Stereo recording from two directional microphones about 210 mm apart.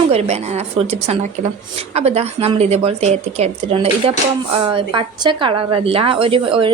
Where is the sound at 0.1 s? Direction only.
30° right (ahead or behind).